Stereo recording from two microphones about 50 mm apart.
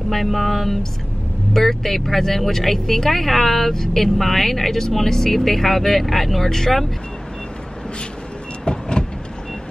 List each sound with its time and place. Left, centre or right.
0.1 s speech: centre
8.6 s vehicle: centre